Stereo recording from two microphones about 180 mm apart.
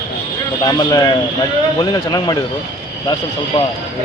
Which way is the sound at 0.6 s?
25° left (ahead or behind).